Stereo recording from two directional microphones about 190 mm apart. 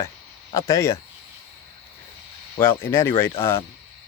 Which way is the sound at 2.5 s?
10° left (ahead or behind).